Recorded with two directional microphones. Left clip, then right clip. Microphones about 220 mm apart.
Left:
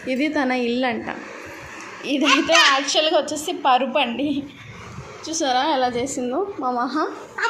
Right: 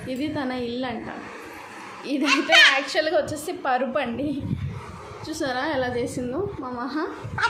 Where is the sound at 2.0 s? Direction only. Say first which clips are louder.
Left 3 dB; 5° left (ahead or behind).